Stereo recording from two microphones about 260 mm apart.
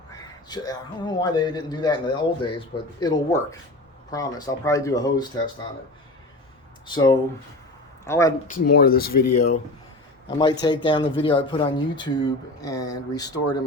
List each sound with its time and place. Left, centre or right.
0.1 s a man's voice: centre
6.8 s a man's voice: centre
8.4 s speech: left
9.0 s speech: left
10.3 s a man's voice: centre